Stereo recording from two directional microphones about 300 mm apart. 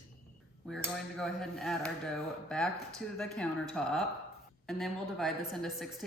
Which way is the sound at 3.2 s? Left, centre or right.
Centre.